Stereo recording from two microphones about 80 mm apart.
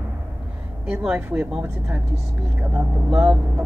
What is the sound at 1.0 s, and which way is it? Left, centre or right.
Speech, centre.